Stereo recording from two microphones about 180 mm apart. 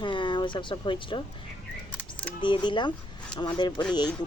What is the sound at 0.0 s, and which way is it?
Speech, 25° left (ahead or behind).